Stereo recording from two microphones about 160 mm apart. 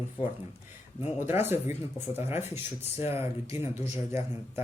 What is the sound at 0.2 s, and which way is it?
Speech, 35° left (ahead or behind).